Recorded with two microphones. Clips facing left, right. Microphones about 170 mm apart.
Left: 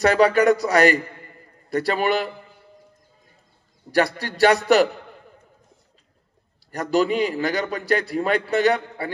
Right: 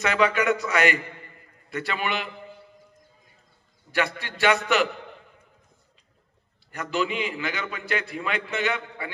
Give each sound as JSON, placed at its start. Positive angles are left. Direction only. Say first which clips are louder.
{"t": 0.0, "sound": "a man's voice", "louder": "left 7 dB", "side_deg": 40}
{"t": 3.9, "sound": "a man's voice", "louder": "left 6 dB", "side_deg": 40}
{"t": 6.7, "sound": "a man's voice", "louder": "left 7 dB", "side_deg": 40}